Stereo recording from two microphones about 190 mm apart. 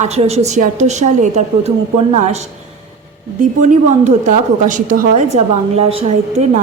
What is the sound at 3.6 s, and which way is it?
A woman's voice, 40° right (ahead or behind).